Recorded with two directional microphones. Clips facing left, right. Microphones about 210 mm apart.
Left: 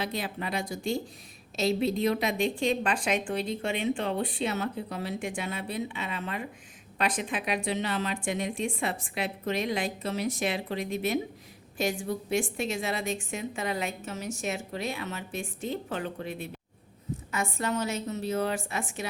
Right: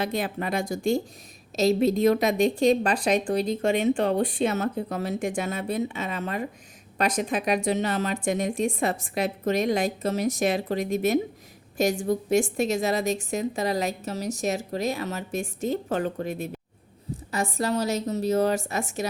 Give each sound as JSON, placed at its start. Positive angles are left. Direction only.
{"t": 0.0, "sound": "a woman's voice", "side_deg": -50}